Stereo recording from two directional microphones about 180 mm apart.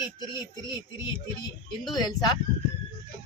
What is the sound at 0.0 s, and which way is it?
Speech, 25° left (ahead or behind).